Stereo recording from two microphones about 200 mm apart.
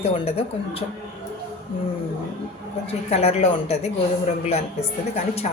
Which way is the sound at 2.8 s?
30° left (ahead or behind).